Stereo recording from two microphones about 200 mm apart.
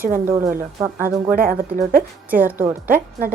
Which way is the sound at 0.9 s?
45° right (ahead or behind).